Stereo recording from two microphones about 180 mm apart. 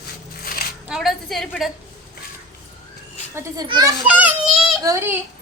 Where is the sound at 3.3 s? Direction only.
20° right (ahead or behind).